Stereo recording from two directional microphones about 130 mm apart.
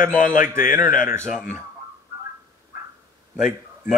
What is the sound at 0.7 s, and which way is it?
Speech, 90° left.